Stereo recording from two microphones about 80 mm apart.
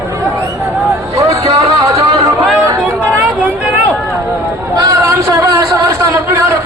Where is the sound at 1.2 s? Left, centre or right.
Right.